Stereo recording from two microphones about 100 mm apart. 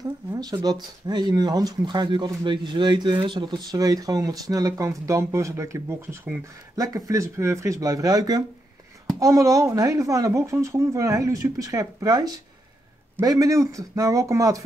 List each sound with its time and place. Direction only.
0.3 s speech: 35° right (ahead or behind); by 3.5 s 50° right (ahead or behind)
3.7 s speech: 35° right (ahead or behind)